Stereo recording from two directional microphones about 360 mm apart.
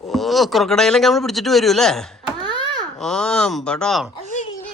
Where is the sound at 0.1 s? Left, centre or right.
Centre.